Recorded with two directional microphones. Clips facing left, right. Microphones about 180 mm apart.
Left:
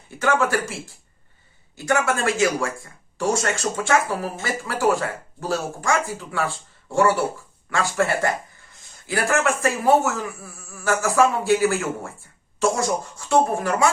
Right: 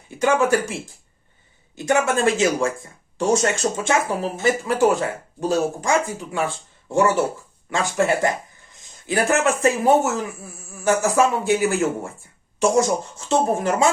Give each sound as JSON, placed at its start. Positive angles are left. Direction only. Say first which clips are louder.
{"t": 0.2, "sound": "speech", "louder": "right 3 dB", "side_deg": -15}